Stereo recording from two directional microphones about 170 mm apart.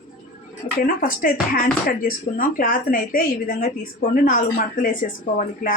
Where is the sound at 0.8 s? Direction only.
55° left (ahead or behind).